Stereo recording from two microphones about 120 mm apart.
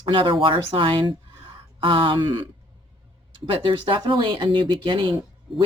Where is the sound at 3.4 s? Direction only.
45° right (ahead or behind).